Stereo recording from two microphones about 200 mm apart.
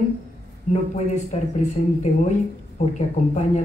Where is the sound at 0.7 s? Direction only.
35° left (ahead or behind).